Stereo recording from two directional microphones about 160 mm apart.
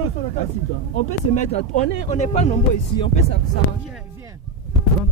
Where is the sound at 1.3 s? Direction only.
45° left (ahead or behind).